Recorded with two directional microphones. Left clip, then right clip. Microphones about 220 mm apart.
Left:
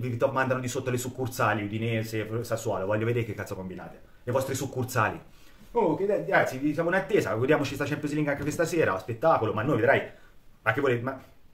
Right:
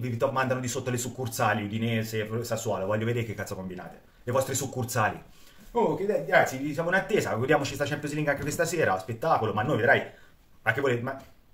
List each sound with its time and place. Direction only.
0.0 s speech: 10° left (ahead or behind)
6.4 s speech: 10° left (ahead or behind)